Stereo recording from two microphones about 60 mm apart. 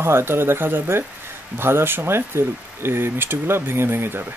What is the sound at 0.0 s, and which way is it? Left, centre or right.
Speech, right.